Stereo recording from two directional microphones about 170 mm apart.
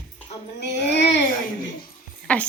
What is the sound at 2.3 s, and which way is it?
Speech, 5° left (ahead or behind).